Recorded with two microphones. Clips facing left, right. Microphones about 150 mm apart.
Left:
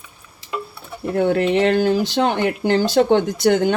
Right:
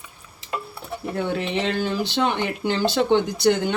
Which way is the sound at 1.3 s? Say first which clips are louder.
Left 9 dB; 55° left (ahead or behind).